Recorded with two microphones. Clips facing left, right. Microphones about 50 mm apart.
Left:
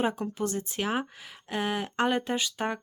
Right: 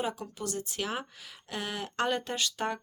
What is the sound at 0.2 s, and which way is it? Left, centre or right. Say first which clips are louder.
A woman's voice: left 6 dB; left.